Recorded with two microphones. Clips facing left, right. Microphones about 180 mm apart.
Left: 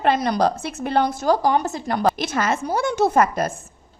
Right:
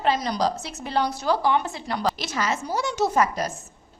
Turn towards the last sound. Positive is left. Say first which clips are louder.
# left 4 dB
turn(degrees=55)  # may be behind; listen again after turning